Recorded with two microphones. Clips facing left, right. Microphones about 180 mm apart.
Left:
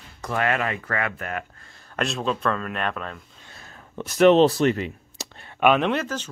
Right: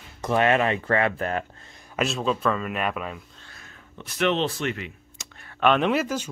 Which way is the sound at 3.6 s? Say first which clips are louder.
Left 10 dB; 40° left (ahead or behind).